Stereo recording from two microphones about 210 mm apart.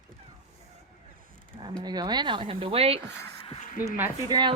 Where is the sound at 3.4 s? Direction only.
30° left (ahead or behind).